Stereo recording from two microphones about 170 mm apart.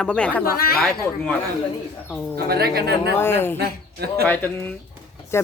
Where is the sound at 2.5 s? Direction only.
65° right (ahead or behind).